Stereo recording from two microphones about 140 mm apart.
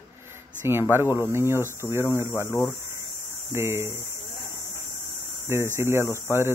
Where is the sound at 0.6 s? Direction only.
15° right (ahead or behind).